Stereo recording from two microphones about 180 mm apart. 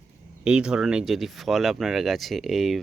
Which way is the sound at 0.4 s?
5° right (ahead or behind).